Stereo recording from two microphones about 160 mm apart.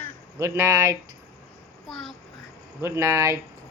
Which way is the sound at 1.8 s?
Centre (ahead or behind).